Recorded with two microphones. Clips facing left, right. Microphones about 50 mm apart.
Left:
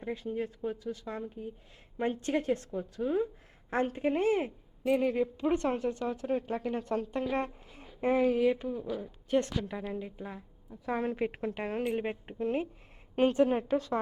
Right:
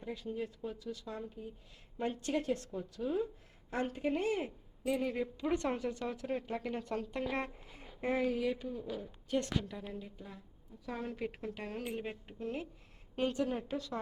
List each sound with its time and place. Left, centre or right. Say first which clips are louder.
0.0 s a woman's voice: left 5 dB; left
4.9 s a woman's voice: left 7 dB; left
7.3 s a sound: left 5 dB; left
8.0 s a woman's voice: left 7 dB; left
8.6 s speech: left 6 dB; left
9.9 s a woman's voice: left 8 dB; left